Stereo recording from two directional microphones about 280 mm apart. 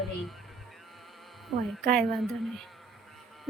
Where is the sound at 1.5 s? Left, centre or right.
Centre.